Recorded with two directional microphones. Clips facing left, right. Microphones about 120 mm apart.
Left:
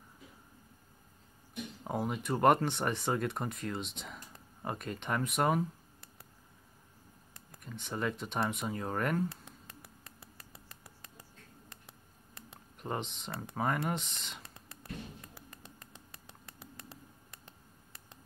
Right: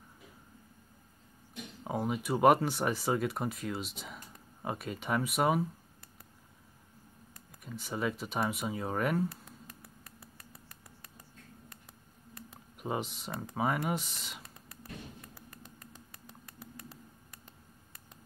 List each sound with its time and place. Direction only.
1.9 s speech: centre (ahead or behind)
7.6 s speech: 5° right (ahead or behind)
10.0 s rodents: 30° left (ahead or behind)
12.7 s speech: 5° right (ahead or behind)
15.8 s patter: 25° left (ahead or behind)